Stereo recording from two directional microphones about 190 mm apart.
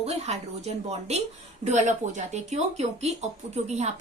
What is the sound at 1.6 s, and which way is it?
A woman's voice, 40° right (ahead or behind).